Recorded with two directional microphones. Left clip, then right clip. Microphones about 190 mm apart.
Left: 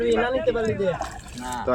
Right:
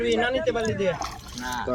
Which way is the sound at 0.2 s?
25° right (ahead or behind).